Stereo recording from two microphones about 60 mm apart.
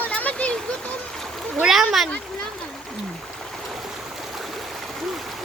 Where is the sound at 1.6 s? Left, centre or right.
Centre.